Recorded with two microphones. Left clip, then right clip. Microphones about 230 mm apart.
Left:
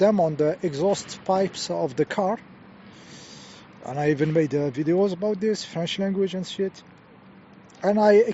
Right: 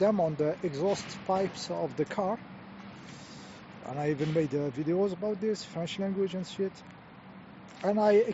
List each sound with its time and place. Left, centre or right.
0.0 s speech: left
3.8 s speech: left
7.8 s speech: left